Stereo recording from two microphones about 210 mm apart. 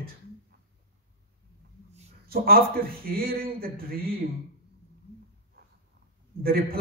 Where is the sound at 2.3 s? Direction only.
45° right (ahead or behind).